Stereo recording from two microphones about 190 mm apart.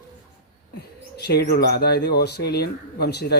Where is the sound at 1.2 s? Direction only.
55° left (ahead or behind).